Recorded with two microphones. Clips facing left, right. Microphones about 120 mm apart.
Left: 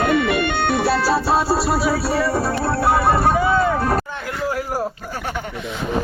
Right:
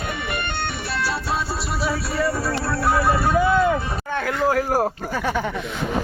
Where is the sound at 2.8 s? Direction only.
55° left (ahead or behind).